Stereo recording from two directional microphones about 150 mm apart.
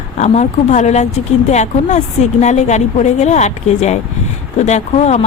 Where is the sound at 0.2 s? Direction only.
50° left (ahead or behind).